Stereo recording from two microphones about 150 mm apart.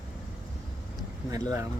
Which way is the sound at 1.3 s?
20° right (ahead or behind).